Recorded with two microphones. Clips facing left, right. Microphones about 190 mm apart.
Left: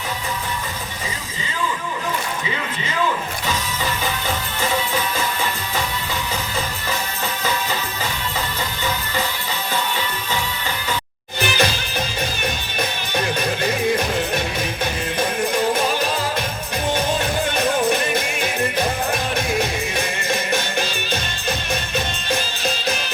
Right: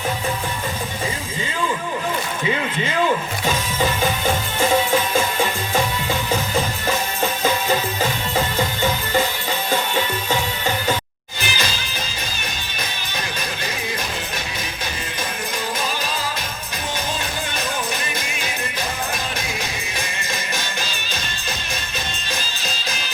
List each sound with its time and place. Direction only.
11.3 s music: 60° left (ahead or behind)
17.6 s music: 60° left (ahead or behind)